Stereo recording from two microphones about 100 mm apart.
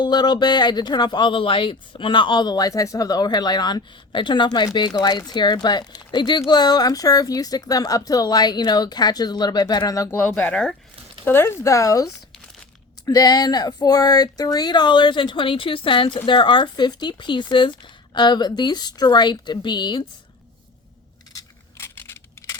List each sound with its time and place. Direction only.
0.0 s speech: 45° left (ahead or behind)
10.2 s speech: 15° left (ahead or behind)
11.3 s speech: 25° left (ahead or behind); by 20.1 s 50° left (ahead or behind)
21.8 s a sound: 25° left (ahead or behind)